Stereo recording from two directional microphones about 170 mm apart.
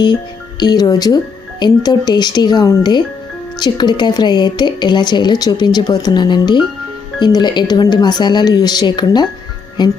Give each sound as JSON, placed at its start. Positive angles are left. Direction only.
{"t": 0.6, "sound": "speech", "side_deg": 25}